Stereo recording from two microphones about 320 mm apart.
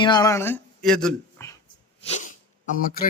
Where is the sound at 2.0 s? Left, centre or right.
Left.